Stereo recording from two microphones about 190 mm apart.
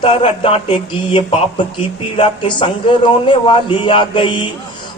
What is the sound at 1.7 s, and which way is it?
A man's voice, 25° left (ahead or behind).